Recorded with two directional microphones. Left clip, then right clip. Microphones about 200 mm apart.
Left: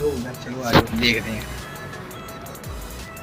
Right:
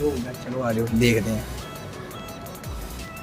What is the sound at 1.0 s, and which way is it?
Speech, 45° right (ahead or behind).